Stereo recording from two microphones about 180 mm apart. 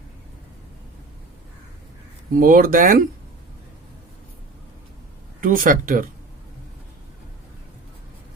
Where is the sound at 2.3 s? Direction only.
50° right (ahead or behind).